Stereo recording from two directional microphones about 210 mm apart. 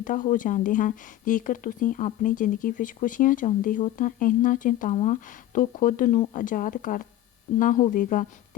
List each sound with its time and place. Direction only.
0.0 s a woman's voice: 40° left (ahead or behind)